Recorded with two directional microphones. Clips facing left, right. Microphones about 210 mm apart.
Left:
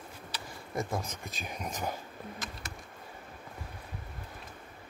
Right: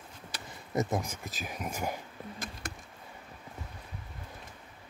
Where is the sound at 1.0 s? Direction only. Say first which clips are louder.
Right 1 dB; 5° right (ahead or behind).